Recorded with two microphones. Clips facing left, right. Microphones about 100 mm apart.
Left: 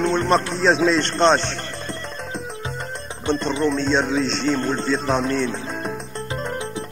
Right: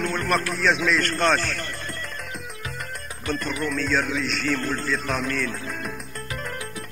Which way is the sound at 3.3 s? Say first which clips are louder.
Left 7 dB; 25° left (ahead or behind).